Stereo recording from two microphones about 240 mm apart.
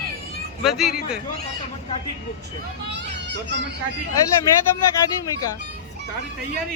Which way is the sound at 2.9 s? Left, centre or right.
Right.